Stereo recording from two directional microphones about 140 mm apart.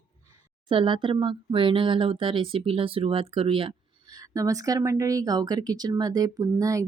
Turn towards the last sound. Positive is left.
turn(degrees=-25)  # may be behind; listen again after turning